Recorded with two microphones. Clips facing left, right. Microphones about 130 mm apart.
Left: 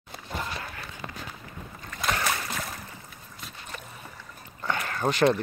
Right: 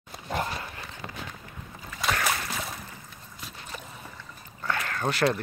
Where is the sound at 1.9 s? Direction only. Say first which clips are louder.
Even; centre (ahead or behind).